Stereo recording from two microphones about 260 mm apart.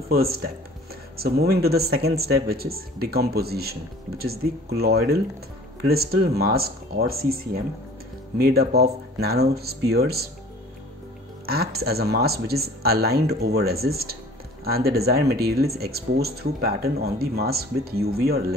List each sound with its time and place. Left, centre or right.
0.1 s speech: right
11.4 s speech: right